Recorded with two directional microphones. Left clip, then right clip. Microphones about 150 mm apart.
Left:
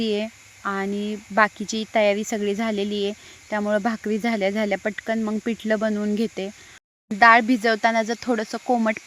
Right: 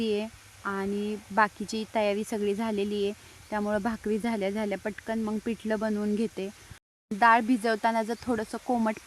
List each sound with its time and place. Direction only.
0.0 s speech: 20° left (ahead or behind)